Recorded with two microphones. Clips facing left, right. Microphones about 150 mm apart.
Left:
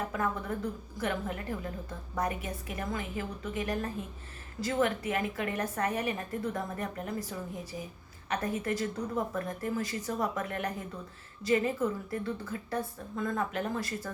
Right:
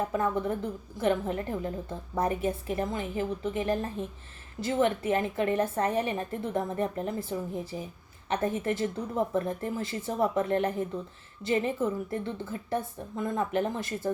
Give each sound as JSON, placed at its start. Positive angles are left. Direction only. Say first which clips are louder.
{"t": 0.1, "sound": "a woman's voice", "louder": "right 5 dB", "side_deg": -25}